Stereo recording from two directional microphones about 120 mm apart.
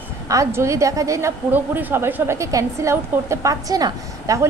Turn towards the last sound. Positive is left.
turn(degrees=-25)  # may be behind; listen again after turning